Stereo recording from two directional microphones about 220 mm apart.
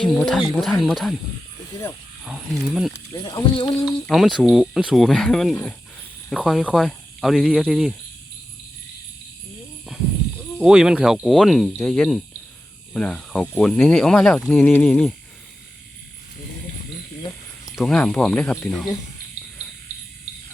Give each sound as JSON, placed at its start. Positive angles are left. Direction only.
{"t": 0.0, "sound": "speech", "side_deg": 0}
{"t": 2.2, "sound": "speech", "side_deg": -5}
{"t": 2.9, "sound": "speech", "side_deg": 20}
{"t": 4.0, "sound": "speech", "side_deg": 0}
{"t": 10.6, "sound": "speech", "side_deg": -5}
{"t": 17.7, "sound": "speech", "side_deg": 5}